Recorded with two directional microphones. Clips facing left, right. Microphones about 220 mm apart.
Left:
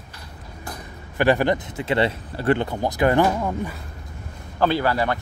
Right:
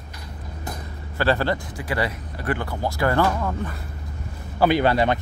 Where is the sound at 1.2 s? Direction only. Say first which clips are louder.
Left 3 dB; 15° left (ahead or behind).